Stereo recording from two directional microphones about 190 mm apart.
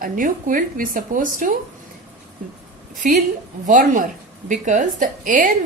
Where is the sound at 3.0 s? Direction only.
45° right (ahead or behind).